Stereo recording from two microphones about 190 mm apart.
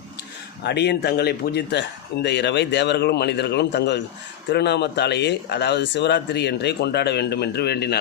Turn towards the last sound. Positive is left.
turn(degrees=60)  # may be behind; listen again after turning